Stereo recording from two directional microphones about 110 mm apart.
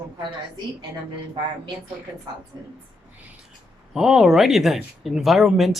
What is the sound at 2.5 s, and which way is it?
Speech, 30° right (ahead or behind).